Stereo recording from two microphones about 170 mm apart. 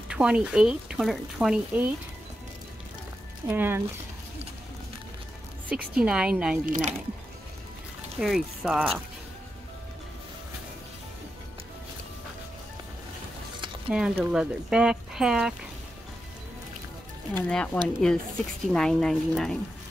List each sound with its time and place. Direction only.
0.1 s speech: 5° right (ahead or behind)
3.4 s a woman's voice: 10° right (ahead or behind)
5.7 s a woman's voice: 5° right (ahead or behind)
6.6 s speech: 45° right (ahead or behind)
8.2 s speech: centre (ahead or behind)
13.8 s speech: 5° right (ahead or behind)
17.5 s speech: 5° left (ahead or behind)